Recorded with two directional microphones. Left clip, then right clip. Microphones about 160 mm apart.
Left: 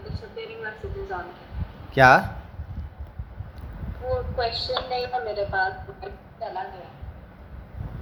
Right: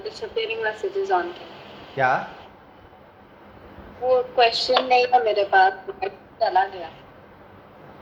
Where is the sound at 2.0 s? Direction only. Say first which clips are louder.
Left 6 dB; 90° left.